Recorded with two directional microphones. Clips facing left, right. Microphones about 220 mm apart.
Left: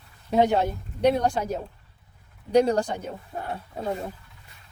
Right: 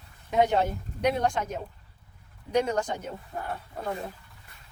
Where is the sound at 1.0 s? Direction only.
35° left (ahead or behind).